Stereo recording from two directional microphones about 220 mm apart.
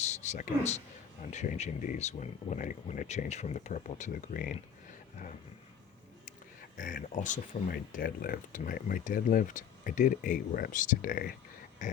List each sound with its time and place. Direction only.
0.0 s a sound: 30° left (ahead or behind)
1.2 s speech: 35° left (ahead or behind)
6.7 s speech: 35° left (ahead or behind)